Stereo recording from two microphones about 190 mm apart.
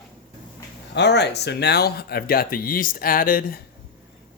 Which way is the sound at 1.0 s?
60° left (ahead or behind).